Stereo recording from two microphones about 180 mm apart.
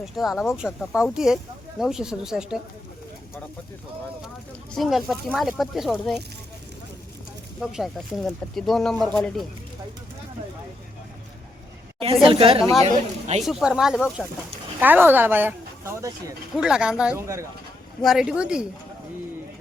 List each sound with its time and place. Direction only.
0.0 s speech: centre (ahead or behind)
4.7 s speech: centre (ahead or behind)
7.6 s speech: centre (ahead or behind)
11.9 s a woman's voice: 30° right (ahead or behind)
13.4 s speech: centre (ahead or behind); by 16.3 s 20° right (ahead or behind)
16.6 s speech: 5° right (ahead or behind)
18.0 s speech: 5° right (ahead or behind)